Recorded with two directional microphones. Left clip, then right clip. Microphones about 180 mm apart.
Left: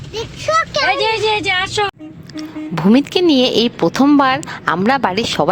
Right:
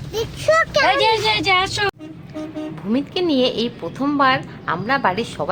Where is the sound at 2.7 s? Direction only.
60° left (ahead or behind).